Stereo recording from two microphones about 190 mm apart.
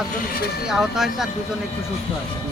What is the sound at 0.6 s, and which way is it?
Speech, centre (ahead or behind).